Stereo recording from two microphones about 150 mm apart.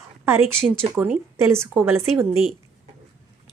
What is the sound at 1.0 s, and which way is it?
Speech, 15° right (ahead or behind).